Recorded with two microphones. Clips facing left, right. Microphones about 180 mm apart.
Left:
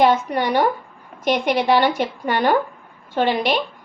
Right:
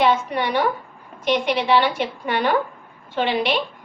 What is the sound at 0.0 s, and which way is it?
A woman's voice, 40° left (ahead or behind).